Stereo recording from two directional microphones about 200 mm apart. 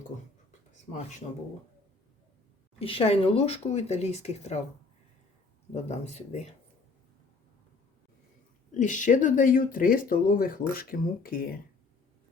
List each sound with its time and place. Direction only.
2.7 s speech: 30° left (ahead or behind)
5.7 s speech: 35° left (ahead or behind)
8.7 s speech: 40° left (ahead or behind)